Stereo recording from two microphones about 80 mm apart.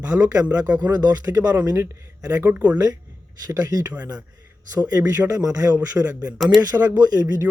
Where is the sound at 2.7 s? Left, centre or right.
Right.